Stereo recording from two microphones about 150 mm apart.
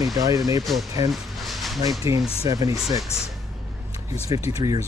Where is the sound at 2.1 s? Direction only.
20° right (ahead or behind).